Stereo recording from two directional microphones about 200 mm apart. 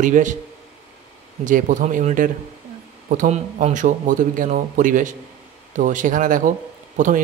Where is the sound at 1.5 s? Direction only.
40° right (ahead or behind).